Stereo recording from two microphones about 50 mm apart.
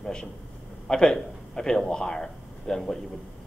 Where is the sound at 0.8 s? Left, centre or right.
Centre.